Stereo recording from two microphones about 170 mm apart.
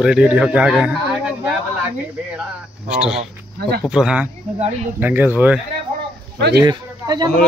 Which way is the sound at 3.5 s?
70° right (ahead or behind).